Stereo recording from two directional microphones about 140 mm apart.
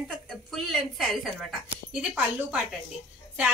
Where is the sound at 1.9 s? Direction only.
5° right (ahead or behind).